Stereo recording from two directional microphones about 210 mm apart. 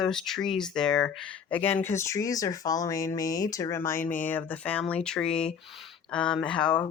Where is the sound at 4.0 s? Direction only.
40° left (ahead or behind).